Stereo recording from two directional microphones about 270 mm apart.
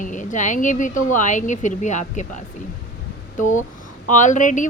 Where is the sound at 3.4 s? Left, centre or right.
Left.